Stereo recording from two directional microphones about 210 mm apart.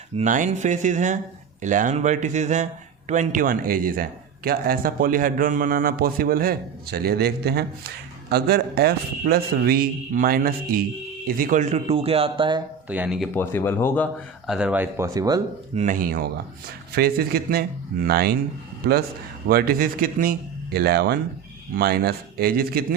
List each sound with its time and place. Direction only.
0.2 s a man's voice: 35° right (ahead or behind)
12.9 s speech: 5° right (ahead or behind)
13.3 s speech: 10° left (ahead or behind); by 15.4 s 15° right (ahead or behind)
15.7 s a man's voice: 35° right (ahead or behind)
19.5 s a man's voice: 45° right (ahead or behind)